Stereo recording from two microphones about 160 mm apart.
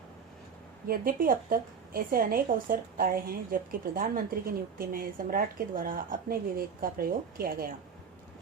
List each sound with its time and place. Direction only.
0.9 s a woman's voice: 65° right (ahead or behind)